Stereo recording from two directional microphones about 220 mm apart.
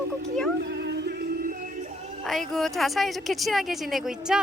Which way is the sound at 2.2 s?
Centre (ahead or behind).